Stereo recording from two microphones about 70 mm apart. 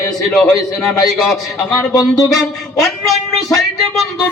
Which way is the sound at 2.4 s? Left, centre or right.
Centre.